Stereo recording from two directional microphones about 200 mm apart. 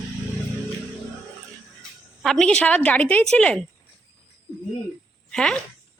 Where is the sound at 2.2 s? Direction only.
5° left (ahead or behind).